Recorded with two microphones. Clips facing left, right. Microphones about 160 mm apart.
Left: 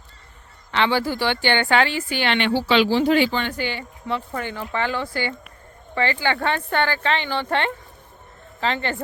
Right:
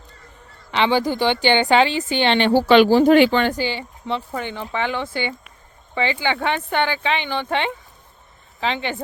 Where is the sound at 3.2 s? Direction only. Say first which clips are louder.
Right 6 dB; 70° right (ahead or behind).